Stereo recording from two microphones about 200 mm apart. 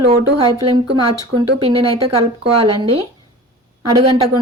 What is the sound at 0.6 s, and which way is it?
Speech, 25° right (ahead or behind).